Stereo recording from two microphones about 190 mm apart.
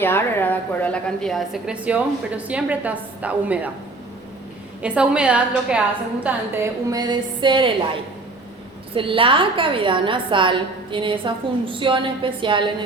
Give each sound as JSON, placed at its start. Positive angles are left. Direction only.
{"t": 0.0, "sound": "a woman's voice", "side_deg": 10}
{"t": 4.8, "sound": "a woman's voice", "side_deg": -5}
{"t": 9.0, "sound": "a woman's voice", "side_deg": -30}